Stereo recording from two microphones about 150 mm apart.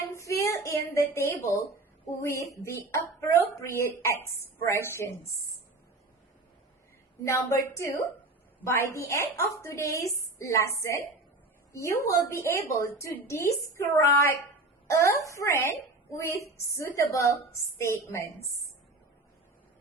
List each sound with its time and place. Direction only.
0.1 s a woman's voice: 20° left (ahead or behind)
7.3 s a woman's voice: 20° left (ahead or behind)